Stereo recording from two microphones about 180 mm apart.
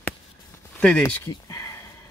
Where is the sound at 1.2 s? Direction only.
20° left (ahead or behind).